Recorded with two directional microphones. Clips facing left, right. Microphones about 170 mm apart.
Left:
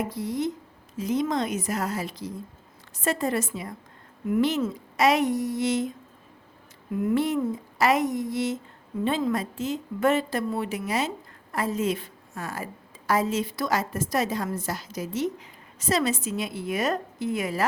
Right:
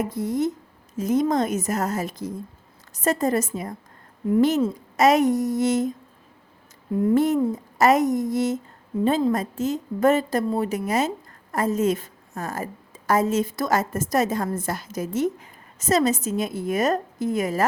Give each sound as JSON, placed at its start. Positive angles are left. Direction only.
{"t": 0.0, "sound": "a woman's voice", "side_deg": -45}
{"t": 6.9, "sound": "speech", "side_deg": -30}
{"t": 7.2, "sound": "a woman's voice", "side_deg": -45}